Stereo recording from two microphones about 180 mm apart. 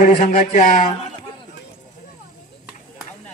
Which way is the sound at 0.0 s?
45° left (ahead or behind).